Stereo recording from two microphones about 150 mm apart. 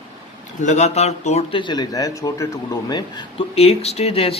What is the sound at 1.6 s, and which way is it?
A man's voice, 30° left (ahead or behind).